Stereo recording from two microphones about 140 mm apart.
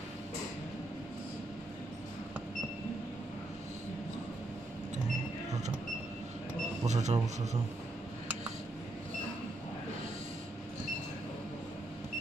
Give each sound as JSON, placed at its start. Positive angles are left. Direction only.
{"t": 6.9, "sound": "speech", "side_deg": -55}